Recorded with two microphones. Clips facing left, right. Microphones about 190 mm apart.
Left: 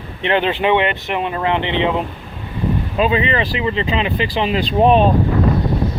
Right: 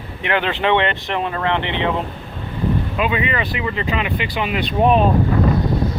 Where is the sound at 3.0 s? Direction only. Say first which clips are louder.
Left 7 dB; 30° left (ahead or behind).